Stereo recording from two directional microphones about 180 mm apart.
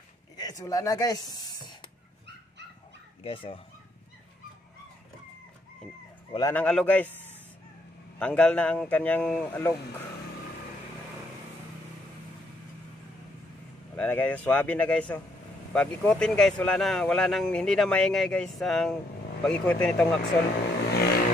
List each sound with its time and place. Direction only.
0.4 s speech: 20° left (ahead or behind)
3.3 s speech: 30° left (ahead or behind)
6.5 s a man's voice: 5° left (ahead or behind)
8.2 s a man's voice: 5° left (ahead or behind)
13.9 s a man's voice: 10° left (ahead or behind)
20.9 s vehicle: 60° left (ahead or behind)